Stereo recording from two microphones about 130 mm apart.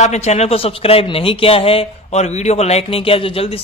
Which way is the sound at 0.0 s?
60° left (ahead or behind).